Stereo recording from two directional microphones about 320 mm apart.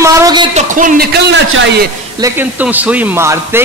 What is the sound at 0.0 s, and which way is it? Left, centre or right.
A man's voice, centre.